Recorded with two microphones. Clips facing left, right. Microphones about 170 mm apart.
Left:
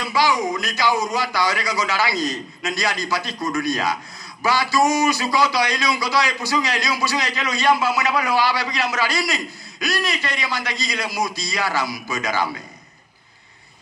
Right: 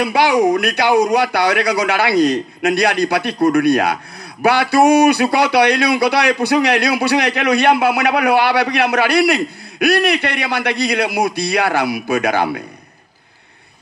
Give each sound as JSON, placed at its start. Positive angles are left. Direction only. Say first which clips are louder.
{"t": 0.0, "sound": "speech", "louder": "right 7 dB", "side_deg": -65}